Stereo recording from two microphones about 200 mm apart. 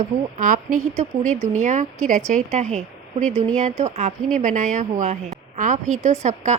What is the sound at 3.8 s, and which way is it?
A woman's voice, 35° right (ahead or behind).